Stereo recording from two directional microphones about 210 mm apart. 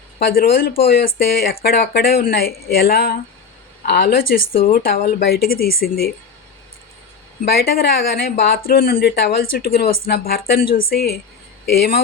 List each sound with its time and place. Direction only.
0.2 s speech: 45° left (ahead or behind)
7.4 s speech: 50° left (ahead or behind)